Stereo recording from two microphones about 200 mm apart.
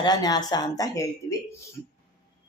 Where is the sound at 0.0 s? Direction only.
20° left (ahead or behind).